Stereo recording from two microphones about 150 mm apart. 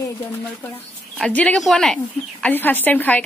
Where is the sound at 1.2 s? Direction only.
10° left (ahead or behind).